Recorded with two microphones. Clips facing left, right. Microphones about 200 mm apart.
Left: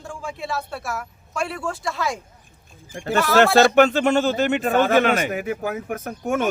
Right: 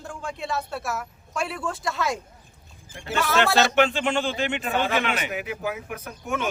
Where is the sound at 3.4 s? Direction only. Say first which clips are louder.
Left 6 dB; 50° left (ahead or behind).